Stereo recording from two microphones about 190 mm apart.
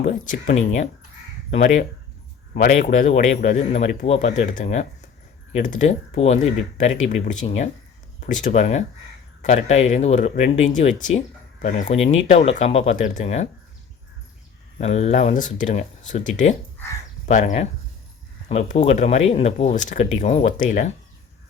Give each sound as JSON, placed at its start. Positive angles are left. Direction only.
{"t": 0.0, "sound": "speech", "side_deg": 40}
{"t": 14.8, "sound": "speech", "side_deg": 35}